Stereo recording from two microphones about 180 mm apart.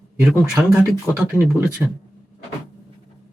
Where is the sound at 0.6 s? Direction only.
10° right (ahead or behind).